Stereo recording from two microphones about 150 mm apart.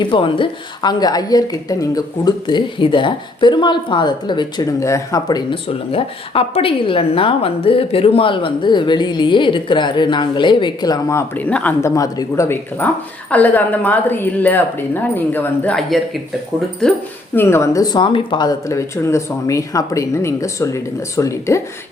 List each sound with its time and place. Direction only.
0.0 s a woman's voice: 35° left (ahead or behind)
5.6 s a woman's voice: 40° left (ahead or behind); by 15.8 s 10° left (ahead or behind)
17.3 s speech: 15° left (ahead or behind)